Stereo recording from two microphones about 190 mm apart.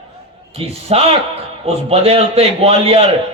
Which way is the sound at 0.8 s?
30° right (ahead or behind).